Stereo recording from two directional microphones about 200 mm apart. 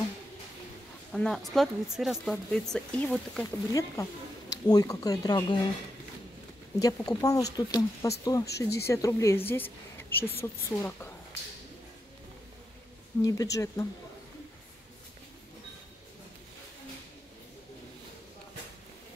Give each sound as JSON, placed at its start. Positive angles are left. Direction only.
{"t": 1.1, "sound": "speech", "side_deg": 0}
{"t": 6.8, "sound": "speech", "side_deg": 15}
{"t": 13.2, "sound": "speech", "side_deg": 15}